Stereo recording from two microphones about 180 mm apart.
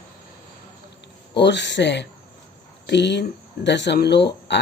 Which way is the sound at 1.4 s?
75° left (ahead or behind).